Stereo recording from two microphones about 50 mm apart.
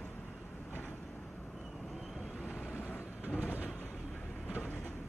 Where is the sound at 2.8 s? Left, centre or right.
Left.